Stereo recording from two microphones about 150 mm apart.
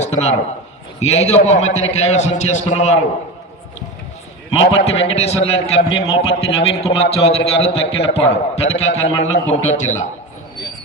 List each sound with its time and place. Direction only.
0.0 s a sound: 45° left (ahead or behind)
0.9 s a man's voice: 45° left (ahead or behind)
4.5 s a man's voice: 45° left (ahead or behind)